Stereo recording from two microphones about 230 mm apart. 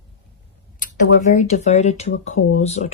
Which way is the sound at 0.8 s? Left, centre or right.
Left.